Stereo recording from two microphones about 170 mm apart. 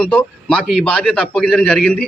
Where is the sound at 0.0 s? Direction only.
5° left (ahead or behind).